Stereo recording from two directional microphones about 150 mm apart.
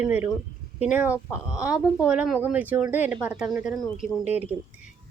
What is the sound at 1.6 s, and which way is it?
Speech, 5° right (ahead or behind).